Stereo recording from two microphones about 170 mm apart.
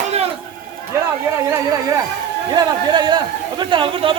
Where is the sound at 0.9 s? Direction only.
15° right (ahead or behind).